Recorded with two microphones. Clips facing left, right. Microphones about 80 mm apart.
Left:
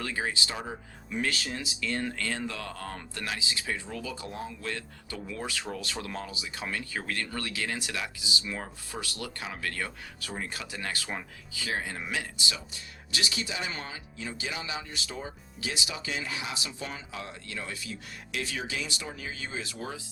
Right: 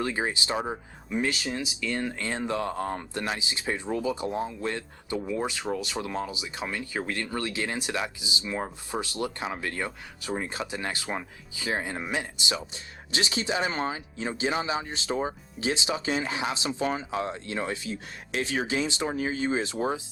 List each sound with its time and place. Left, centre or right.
0.0 s speech: right
13.5 s speech: right